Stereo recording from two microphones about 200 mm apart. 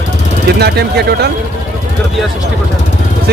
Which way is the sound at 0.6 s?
55° right (ahead or behind).